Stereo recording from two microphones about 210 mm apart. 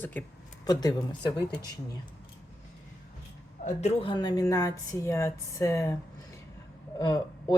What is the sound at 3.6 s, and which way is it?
Speech, 30° left (ahead or behind).